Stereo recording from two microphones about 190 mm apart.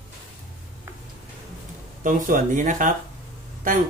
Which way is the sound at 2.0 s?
45° right (ahead or behind).